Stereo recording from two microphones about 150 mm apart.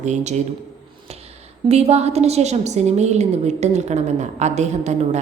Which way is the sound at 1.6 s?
45° right (ahead or behind).